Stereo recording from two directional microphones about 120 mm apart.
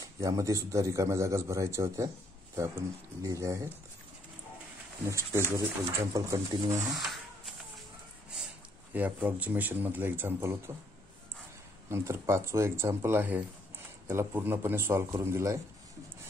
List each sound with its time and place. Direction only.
0.0 s a man's voice: 30° right (ahead or behind)
3.2 s a man's voice: 25° right (ahead or behind)
5.0 s a man's voice: 20° right (ahead or behind)
7.0 s shuffling cards: centre (ahead or behind)
8.9 s speech: 15° right (ahead or behind)
11.9 s a man's voice: 25° right (ahead or behind)